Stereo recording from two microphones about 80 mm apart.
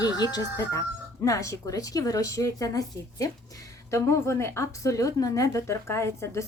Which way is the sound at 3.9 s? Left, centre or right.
Left.